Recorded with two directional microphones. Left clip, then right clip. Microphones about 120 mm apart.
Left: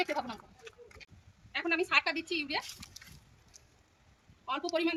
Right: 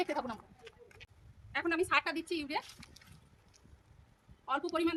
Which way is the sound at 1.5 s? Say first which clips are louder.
Left 2 dB; 40° right (ahead or behind).